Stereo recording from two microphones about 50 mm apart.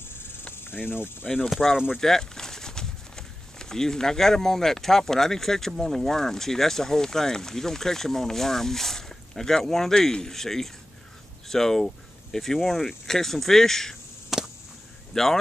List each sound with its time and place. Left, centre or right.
0.0 s cricket: left
1.6 s speech: centre
11.4 s a sound: centre
12.6 s speech: centre
14.3 s a sound: centre
15.2 s speech: centre